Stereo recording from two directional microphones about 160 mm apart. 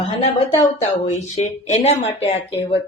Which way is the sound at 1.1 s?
45° left (ahead or behind).